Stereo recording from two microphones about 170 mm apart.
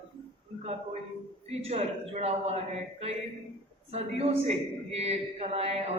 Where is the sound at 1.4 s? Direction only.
40° right (ahead or behind).